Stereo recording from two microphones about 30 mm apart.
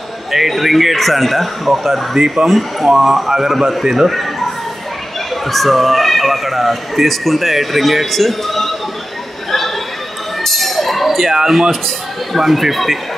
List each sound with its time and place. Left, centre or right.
0.3 s speech: centre
2.1 s a man's voice: centre
4.1 s a sound: centre
5.5 s speech: centre
10.4 s a sound: centre
11.2 s a man's voice: centre
12.4 s speech: centre